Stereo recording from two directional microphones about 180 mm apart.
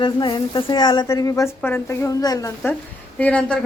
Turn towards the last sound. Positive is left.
turn(degrees=5)  # may be behind; listen again after turning